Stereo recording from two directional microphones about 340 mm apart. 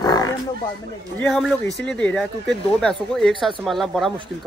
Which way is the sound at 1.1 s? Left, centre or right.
Centre.